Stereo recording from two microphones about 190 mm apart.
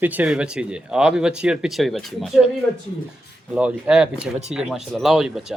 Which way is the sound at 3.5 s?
5° right (ahead or behind).